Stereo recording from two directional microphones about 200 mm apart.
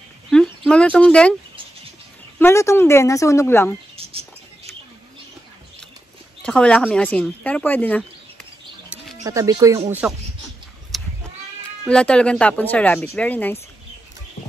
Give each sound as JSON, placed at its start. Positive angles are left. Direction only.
{"t": 0.3, "sound": "speech", "side_deg": 5}
{"t": 2.3, "sound": "speech", "side_deg": 10}
{"t": 3.9, "sound": "bird", "side_deg": -30}
{"t": 6.4, "sound": "speech", "side_deg": 5}
{"t": 9.2, "sound": "speech", "side_deg": -15}
{"t": 10.9, "sound": "cat", "side_deg": 0}
{"t": 11.8, "sound": "speech", "side_deg": 5}